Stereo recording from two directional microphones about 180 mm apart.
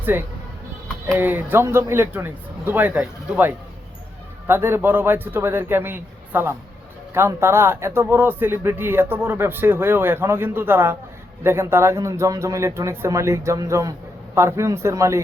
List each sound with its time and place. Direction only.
0.0 s speech: 10° right (ahead or behind)